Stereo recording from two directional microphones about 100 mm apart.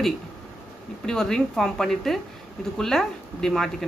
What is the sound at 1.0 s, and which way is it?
Speech, 5° left (ahead or behind).